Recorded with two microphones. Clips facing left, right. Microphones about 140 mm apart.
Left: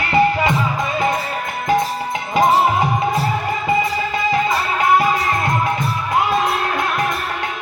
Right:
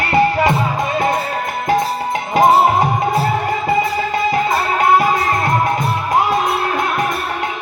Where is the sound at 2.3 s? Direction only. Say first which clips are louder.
Right 3 dB; 45° right (ahead or behind).